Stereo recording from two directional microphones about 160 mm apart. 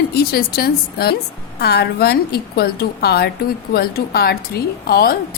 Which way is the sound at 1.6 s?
90° left.